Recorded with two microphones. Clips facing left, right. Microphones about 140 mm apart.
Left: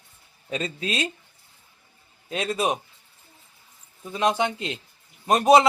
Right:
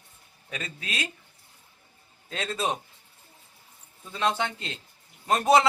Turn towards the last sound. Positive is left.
turn(degrees=20)  # may be behind; listen again after turning